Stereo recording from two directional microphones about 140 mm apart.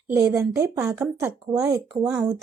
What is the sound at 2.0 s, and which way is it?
Speech, 10° right (ahead or behind).